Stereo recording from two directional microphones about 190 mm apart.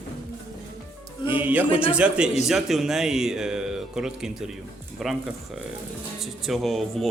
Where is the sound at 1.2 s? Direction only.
10° right (ahead or behind).